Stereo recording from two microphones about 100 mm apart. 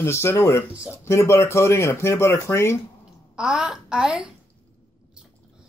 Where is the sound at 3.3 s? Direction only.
5° right (ahead or behind).